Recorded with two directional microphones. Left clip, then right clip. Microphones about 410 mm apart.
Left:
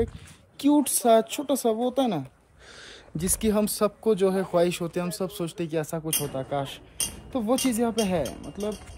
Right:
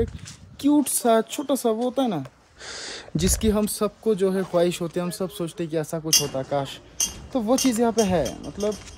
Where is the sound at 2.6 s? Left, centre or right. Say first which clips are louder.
Right 10 dB; centre.